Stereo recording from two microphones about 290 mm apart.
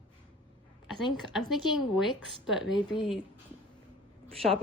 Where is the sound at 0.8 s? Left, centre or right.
Centre.